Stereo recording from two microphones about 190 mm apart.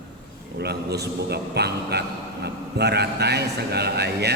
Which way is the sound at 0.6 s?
60° right (ahead or behind).